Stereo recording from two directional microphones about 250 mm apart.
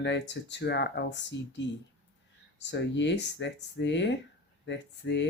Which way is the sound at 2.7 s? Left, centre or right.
Left.